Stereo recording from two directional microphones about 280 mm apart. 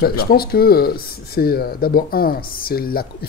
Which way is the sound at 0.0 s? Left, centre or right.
Left.